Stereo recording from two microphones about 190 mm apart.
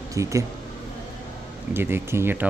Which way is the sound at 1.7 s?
10° right (ahead or behind).